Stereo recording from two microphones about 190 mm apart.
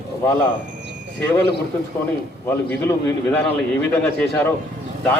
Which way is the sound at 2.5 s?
10° left (ahead or behind).